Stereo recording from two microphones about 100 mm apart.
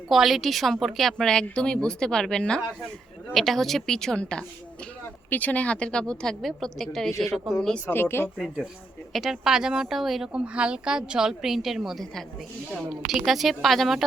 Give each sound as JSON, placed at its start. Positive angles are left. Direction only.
{"t": 0.1, "sound": "a woman's voice", "side_deg": 0}
{"t": 7.9, "sound": "speech", "side_deg": 25}
{"t": 9.1, "sound": "speech", "side_deg": -5}